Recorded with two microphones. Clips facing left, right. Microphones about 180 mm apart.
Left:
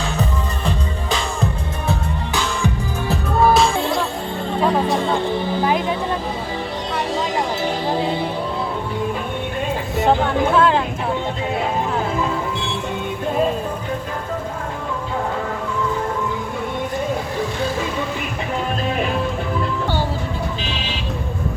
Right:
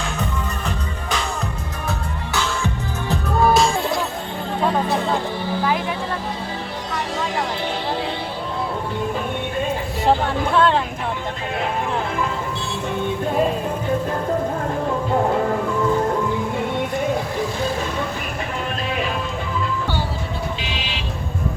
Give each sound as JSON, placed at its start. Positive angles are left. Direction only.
{"t": 3.1, "sound": "music", "side_deg": 0}
{"t": 5.5, "sound": "a sound", "side_deg": 20}
{"t": 10.1, "sound": "vehicle", "side_deg": 5}